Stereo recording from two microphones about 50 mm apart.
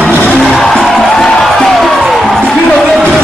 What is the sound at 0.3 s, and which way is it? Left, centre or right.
Music, centre.